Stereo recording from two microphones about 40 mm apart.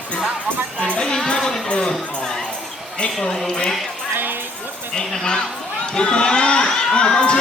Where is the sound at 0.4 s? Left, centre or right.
Left.